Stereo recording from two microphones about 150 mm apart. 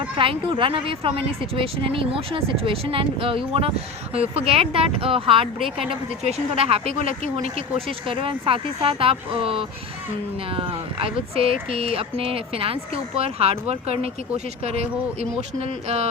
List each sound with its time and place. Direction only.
0.0 s speech: 35° right (ahead or behind)
5.5 s a woman's voice: centre (ahead or behind)
5.9 s speech: 40° right (ahead or behind)